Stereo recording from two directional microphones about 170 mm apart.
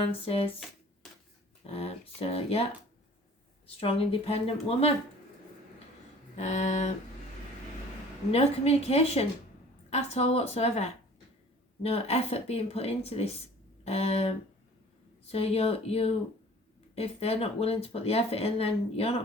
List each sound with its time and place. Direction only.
0.1 s speech: 35° left (ahead or behind)
1.6 s speech: 35° left (ahead or behind)
3.8 s speech: 35° left (ahead or behind)
6.3 s a sound: 45° left (ahead or behind)
8.3 s speech: 40° left (ahead or behind)